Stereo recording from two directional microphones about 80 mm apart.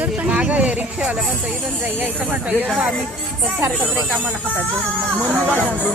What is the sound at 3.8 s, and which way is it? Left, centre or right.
Speech, right.